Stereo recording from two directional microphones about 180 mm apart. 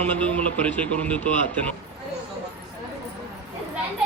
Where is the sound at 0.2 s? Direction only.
10° left (ahead or behind).